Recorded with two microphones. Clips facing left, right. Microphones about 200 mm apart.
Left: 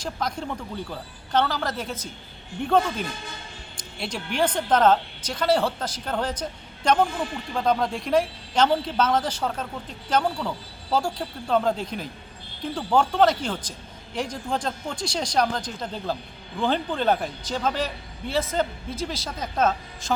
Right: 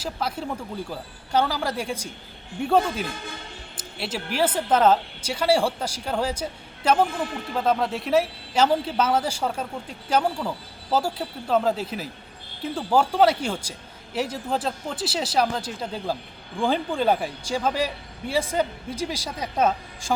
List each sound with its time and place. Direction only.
0.0 s a man's voice: 5° right (ahead or behind)